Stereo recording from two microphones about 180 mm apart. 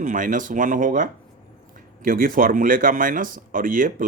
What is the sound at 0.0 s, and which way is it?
Speech, 45° right (ahead or behind).